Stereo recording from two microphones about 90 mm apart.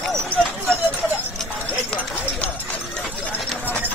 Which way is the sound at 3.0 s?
10° left (ahead or behind).